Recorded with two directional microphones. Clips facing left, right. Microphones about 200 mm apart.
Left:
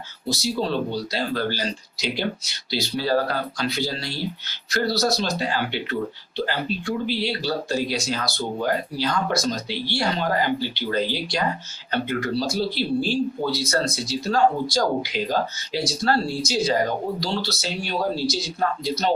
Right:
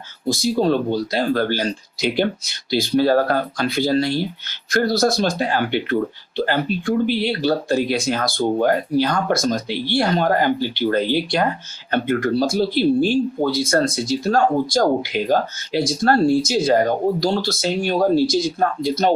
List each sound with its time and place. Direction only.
0.3 s speech: 50° right (ahead or behind)